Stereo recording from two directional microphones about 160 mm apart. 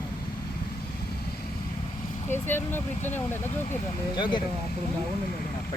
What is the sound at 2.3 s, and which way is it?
Speech, 15° left (ahead or behind).